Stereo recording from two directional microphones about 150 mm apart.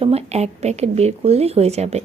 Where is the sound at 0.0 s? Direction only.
45° right (ahead or behind).